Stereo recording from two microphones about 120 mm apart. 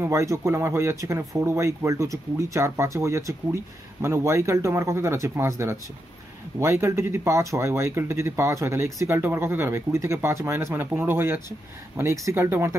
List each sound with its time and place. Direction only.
0.0 s speech: 25° right (ahead or behind)